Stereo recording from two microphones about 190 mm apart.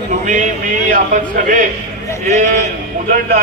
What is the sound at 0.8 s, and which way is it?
Speech, 40° right (ahead or behind).